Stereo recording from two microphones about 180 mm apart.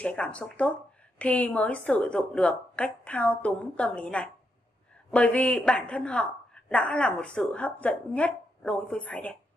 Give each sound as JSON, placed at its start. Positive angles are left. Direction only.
{"t": 0.0, "sound": "speech", "side_deg": 5}